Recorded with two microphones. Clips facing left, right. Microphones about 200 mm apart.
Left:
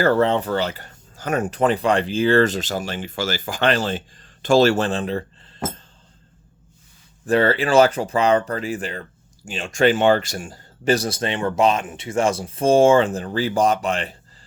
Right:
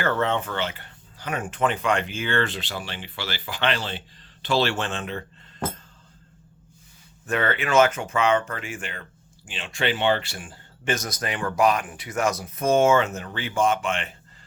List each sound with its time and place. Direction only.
0.0 s speech: 35° left (ahead or behind)
7.3 s speech: 30° left (ahead or behind)